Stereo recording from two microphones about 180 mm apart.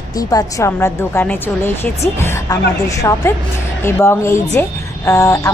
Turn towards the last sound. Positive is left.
turn(degrees=15)  # may be behind; listen again after turning